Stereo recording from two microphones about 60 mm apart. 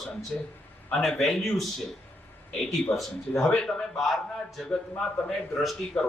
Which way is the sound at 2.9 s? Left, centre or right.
Left.